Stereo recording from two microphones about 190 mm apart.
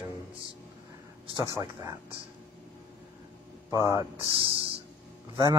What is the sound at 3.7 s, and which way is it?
Speech, 15° right (ahead or behind).